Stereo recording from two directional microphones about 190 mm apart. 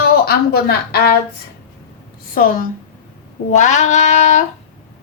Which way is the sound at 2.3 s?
50° left (ahead or behind).